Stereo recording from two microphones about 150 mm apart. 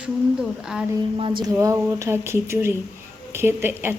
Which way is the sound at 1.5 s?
20° right (ahead or behind).